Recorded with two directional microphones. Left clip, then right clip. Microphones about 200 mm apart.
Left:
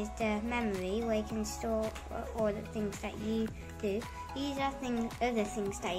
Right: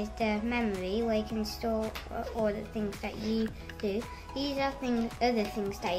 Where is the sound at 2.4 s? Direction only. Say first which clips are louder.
Right 2 dB; centre (ahead or behind).